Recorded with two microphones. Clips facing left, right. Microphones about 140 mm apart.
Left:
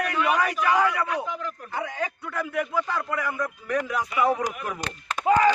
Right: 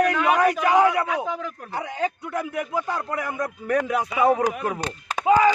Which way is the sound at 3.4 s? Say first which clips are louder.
Right 4 dB; 45° right (ahead or behind).